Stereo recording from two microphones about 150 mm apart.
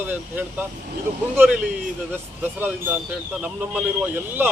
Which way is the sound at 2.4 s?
15° right (ahead or behind).